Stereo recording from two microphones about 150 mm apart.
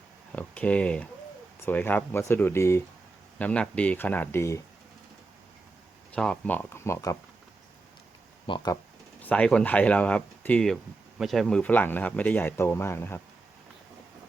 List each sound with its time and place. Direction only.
0.3 s speech: 10° left (ahead or behind)
6.1 s speech: 5° left (ahead or behind)
8.4 s speech: 30° left (ahead or behind)
9.2 s speech: 5° left (ahead or behind)